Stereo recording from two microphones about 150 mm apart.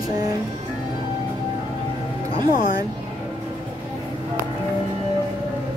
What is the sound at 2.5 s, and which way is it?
Speech, 70° left (ahead or behind).